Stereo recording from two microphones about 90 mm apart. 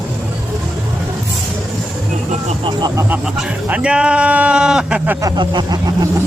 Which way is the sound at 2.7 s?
55° right (ahead or behind).